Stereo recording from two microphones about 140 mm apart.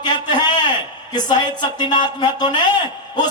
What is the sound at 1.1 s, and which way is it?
Speech, 30° left (ahead or behind).